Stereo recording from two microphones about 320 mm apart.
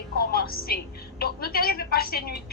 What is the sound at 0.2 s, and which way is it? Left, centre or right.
Music, left.